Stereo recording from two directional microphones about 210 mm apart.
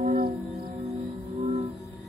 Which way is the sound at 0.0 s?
40° right (ahead or behind).